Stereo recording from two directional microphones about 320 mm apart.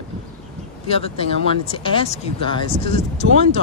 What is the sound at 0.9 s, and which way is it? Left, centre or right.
Speech, centre.